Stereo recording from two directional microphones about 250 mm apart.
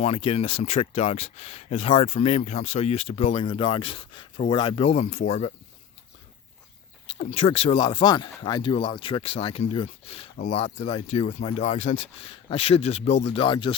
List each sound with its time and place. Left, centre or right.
0.0 s speech: left
7.1 s speech: left